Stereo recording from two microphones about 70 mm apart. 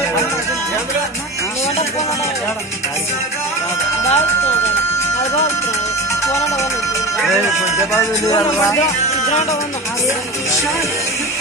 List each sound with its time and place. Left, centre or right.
4.0 s speech: left
7.9 s a man's voice: left